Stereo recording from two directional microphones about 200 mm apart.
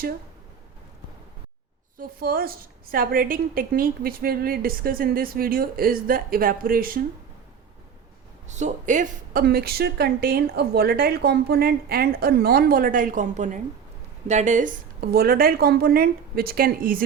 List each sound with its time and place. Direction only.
2.0 s speech: 50° right (ahead or behind)
8.4 s speech: 35° right (ahead or behind)